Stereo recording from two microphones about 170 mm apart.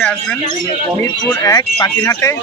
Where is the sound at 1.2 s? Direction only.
20° left (ahead or behind).